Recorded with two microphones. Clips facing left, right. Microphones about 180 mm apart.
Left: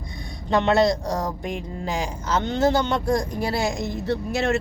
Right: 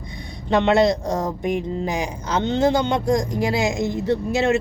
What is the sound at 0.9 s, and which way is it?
Speech, 20° right (ahead or behind).